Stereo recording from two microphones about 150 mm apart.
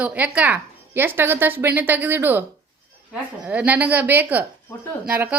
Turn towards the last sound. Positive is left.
turn(degrees=-10)  # may be behind; listen again after turning